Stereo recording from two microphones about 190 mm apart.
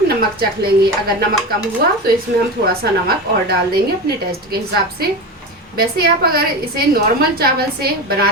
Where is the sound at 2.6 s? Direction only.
55° right (ahead or behind).